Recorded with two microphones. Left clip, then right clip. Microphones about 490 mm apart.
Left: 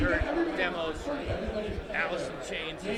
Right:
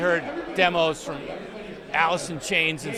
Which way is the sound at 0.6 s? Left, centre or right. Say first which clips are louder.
Right 10 dB; right.